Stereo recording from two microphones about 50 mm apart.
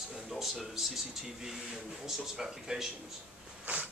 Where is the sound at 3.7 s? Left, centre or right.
Right.